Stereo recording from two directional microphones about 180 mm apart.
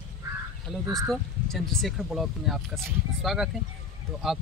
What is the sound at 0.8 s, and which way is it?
Speech, 20° right (ahead or behind).